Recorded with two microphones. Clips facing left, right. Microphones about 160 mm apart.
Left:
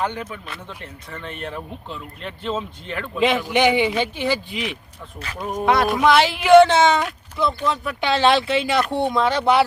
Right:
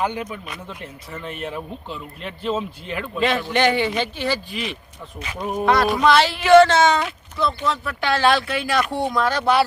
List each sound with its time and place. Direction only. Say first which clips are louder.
0.0 s speech: right 1 dB; 10° right (ahead or behind)
3.2 s a man's voice: left 2 dB; 10° left (ahead or behind)
5.4 s speech: right 1 dB; 5° right (ahead or behind)
5.6 s a man's voice: even; 10° left (ahead or behind)